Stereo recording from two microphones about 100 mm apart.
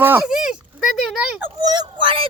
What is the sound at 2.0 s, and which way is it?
Speech, 60° right (ahead or behind).